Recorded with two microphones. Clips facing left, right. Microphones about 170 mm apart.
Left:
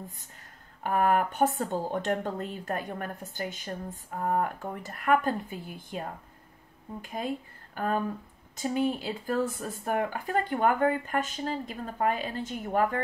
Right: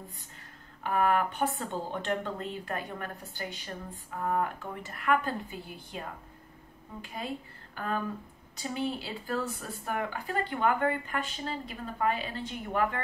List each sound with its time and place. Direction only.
0.8 s speech: 45° left (ahead or behind)
7.0 s speech: 45° left (ahead or behind)